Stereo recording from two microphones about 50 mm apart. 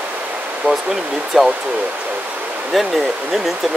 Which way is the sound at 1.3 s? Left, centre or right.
Centre.